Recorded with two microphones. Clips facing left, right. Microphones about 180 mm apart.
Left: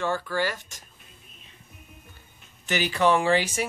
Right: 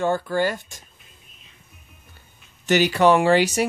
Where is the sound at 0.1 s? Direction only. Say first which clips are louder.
Right 5 dB; 25° right (ahead or behind).